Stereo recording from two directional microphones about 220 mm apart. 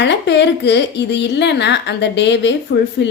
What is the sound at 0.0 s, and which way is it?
A woman's voice, 50° left (ahead or behind).